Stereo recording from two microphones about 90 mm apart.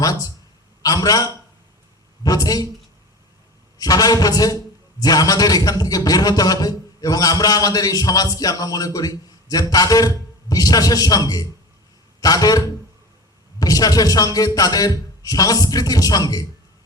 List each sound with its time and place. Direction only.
0.0 s a man's voice: 45° left (ahead or behind)
3.8 s a man's voice: 45° left (ahead or behind)